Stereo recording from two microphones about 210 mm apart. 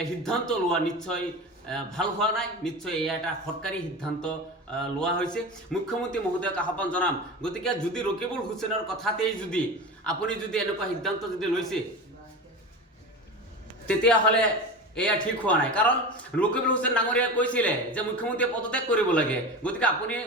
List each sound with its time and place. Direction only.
0.0 s a man's voice: centre (ahead or behind)
4.8 s a man's voice: 5° left (ahead or behind)
13.8 s a man's voice: 5° left (ahead or behind)